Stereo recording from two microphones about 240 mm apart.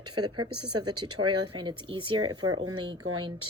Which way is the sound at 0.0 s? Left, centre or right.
Right.